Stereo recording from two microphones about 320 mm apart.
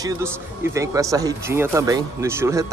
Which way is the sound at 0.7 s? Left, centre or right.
Centre.